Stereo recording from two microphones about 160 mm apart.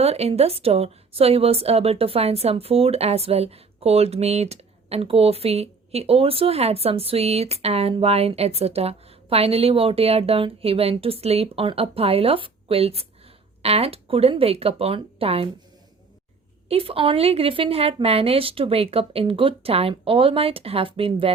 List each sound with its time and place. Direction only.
0.0 s a woman's voice: 40° right (ahead or behind)
16.6 s a woman's voice: 35° right (ahead or behind)